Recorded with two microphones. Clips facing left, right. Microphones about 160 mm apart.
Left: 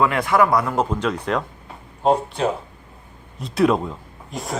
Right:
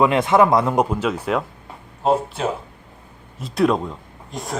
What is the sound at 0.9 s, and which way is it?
Speech, 5° right (ahead or behind).